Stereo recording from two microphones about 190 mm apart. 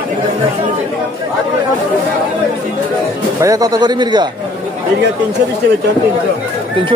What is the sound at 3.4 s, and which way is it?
Speech, 20° right (ahead or behind).